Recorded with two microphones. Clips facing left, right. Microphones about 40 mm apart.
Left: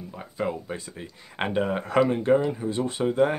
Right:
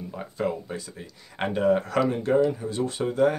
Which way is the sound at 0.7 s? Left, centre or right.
Left.